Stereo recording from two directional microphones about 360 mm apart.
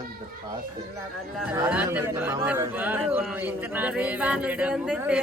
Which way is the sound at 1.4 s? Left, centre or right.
Centre.